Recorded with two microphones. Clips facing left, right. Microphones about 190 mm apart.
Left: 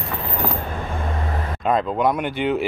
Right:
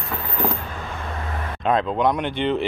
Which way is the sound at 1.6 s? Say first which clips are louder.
Even; centre (ahead or behind).